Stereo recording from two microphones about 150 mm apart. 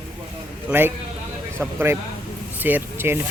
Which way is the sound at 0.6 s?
15° right (ahead or behind).